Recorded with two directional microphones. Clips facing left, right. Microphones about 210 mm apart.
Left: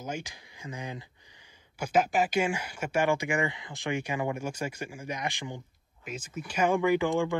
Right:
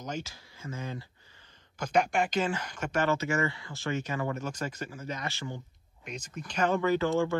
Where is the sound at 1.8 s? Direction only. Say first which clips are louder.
Left 1 dB; 5° left (ahead or behind).